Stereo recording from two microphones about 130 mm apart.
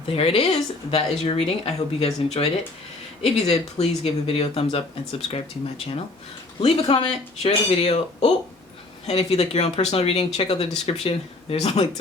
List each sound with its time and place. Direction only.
0.1 s speech: 50° left (ahead or behind)